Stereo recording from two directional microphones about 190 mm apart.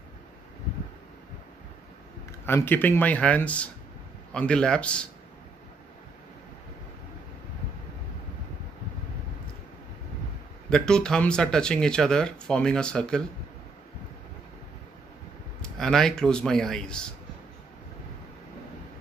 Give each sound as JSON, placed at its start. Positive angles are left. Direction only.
{"t": 2.4, "sound": "speech", "side_deg": 10}
{"t": 10.7, "sound": "speech", "side_deg": 5}
{"t": 15.6, "sound": "speech", "side_deg": 0}